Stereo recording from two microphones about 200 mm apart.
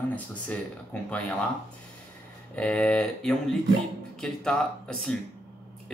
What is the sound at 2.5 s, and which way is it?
A man's voice, 5° left (ahead or behind).